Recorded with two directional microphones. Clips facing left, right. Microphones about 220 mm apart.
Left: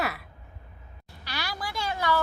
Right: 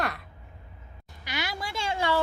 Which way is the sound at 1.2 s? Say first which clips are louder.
Right 1 dB; 20° right (ahead or behind).